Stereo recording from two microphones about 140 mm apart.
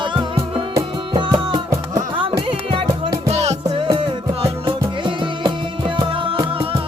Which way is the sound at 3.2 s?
50° right (ahead or behind).